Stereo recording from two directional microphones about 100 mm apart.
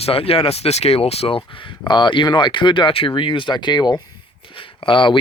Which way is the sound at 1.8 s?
45° left (ahead or behind).